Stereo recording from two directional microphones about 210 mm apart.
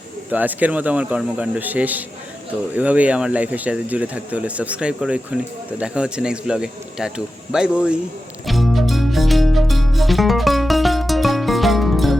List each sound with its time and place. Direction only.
0.3 s a man's voice: 10° right (ahead or behind)
8.4 s music: centre (ahead or behind)